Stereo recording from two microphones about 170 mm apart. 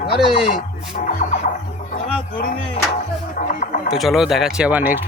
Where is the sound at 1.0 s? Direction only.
45° left (ahead or behind).